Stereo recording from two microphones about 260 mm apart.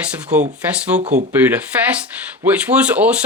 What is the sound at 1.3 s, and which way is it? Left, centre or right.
Speech, centre.